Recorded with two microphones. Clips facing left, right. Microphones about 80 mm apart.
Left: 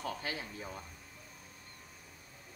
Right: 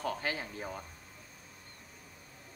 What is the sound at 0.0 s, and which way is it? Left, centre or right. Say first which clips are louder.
Speech: right 4 dB; right.